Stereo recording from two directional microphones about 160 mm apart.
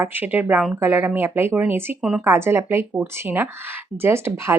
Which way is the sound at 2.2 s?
15° right (ahead or behind).